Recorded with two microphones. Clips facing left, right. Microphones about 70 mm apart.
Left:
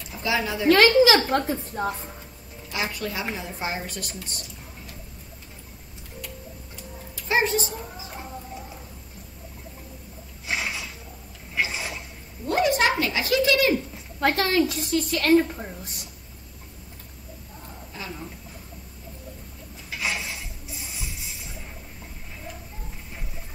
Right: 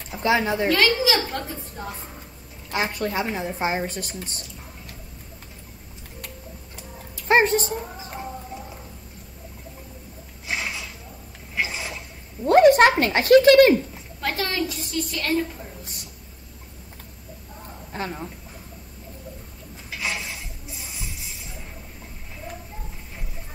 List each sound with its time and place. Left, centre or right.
0.2 s a woman's voice: right
0.7 s a woman's voice: left
2.7 s a woman's voice: right
7.2 s chicken: right
10.5 s a sound: centre
12.4 s speech: right
14.2 s a woman's voice: left
17.9 s speech: right
20.0 s a sound: centre